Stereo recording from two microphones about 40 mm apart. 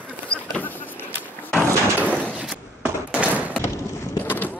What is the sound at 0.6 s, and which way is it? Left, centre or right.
Vehicle, left.